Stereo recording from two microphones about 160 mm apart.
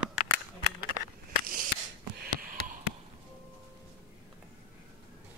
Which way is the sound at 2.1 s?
60° right (ahead or behind).